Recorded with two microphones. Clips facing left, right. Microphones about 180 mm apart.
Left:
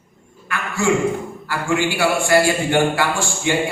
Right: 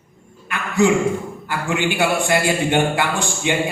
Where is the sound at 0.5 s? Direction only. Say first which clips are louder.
Right 3 dB; 20° right (ahead or behind).